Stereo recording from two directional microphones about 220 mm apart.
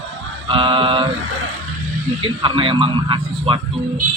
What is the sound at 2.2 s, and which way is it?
A man's voice, 25° right (ahead or behind).